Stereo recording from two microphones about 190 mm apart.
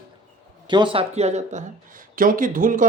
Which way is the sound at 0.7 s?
25° right (ahead or behind).